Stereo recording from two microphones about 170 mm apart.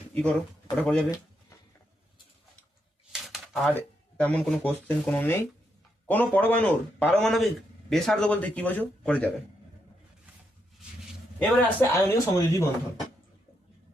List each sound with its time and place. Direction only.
0.1 s speech: 5° left (ahead or behind)
3.1 s a sound: centre (ahead or behind)
3.7 s speech: 10° left (ahead or behind)
11.3 s speech: 10° left (ahead or behind)